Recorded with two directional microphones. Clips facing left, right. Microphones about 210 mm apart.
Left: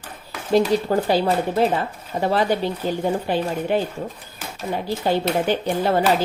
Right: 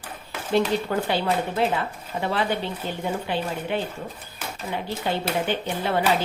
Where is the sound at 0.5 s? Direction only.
40° left (ahead or behind).